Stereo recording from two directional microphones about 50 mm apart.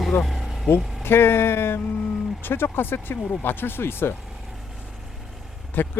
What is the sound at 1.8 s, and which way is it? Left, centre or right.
Vehicle, centre.